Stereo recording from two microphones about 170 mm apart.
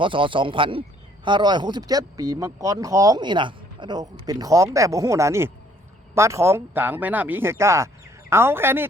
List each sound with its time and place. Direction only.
0.0 s speech: 30° right (ahead or behind); by 8.9 s 15° right (ahead or behind)